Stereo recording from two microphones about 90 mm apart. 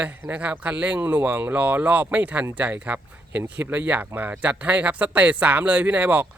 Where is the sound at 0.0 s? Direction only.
15° right (ahead or behind).